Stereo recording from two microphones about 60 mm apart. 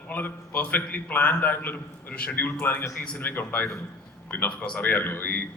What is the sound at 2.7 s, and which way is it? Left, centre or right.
A man's voice, left.